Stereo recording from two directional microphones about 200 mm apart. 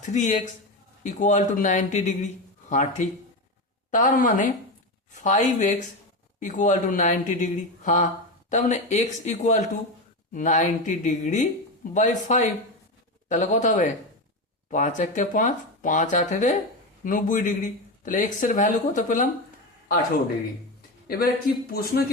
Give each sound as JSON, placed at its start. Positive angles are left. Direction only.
{"t": 0.0, "sound": "speech", "side_deg": 40}
{"t": 21.7, "sound": "speech", "side_deg": 50}